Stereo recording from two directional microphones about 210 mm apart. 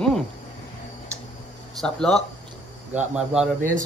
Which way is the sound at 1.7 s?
5° left (ahead or behind).